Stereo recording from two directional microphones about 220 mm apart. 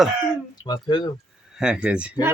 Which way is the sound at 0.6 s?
20° left (ahead or behind).